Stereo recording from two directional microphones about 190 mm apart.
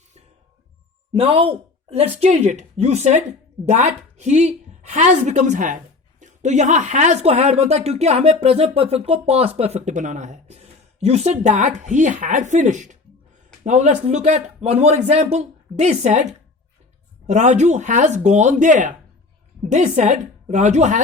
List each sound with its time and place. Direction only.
1.1 s a woman's voice: 30° right (ahead or behind)